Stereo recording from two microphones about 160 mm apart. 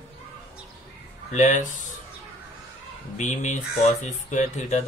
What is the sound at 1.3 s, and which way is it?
Speech, 50° left (ahead or behind).